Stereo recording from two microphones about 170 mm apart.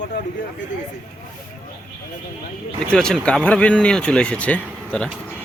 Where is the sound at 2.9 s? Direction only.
5° left (ahead or behind).